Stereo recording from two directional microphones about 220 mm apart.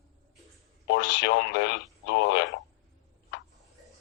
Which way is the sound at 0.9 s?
50° left (ahead or behind).